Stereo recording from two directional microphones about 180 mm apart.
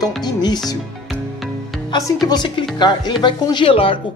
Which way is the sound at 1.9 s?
20° left (ahead or behind).